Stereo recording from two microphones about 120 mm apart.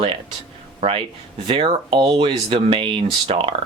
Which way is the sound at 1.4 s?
50° right (ahead or behind).